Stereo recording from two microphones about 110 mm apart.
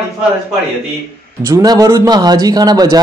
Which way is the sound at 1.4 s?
30° right (ahead or behind).